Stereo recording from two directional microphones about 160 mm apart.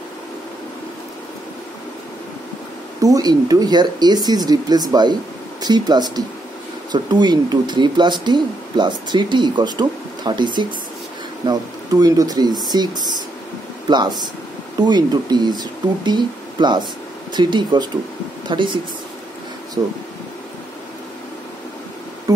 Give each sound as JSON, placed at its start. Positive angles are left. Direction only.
{"t": 3.0, "sound": "speech", "side_deg": -25}